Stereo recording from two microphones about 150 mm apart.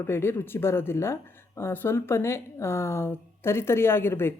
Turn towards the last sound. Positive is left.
turn(degrees=15)  # may be behind; listen again after turning